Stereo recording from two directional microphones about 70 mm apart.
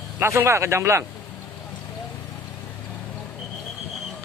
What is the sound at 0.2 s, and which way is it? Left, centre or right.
Speech, right.